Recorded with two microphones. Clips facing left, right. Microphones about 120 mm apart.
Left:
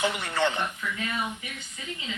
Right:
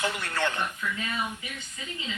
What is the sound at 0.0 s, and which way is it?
Speech, 15° left (ahead or behind).